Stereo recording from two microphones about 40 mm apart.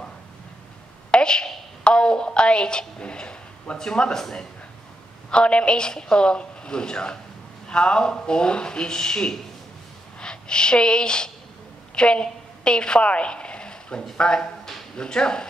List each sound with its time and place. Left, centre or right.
1.1 s a sound: left
1.9 s a woman's voice: left
5.3 s a woman's voice: left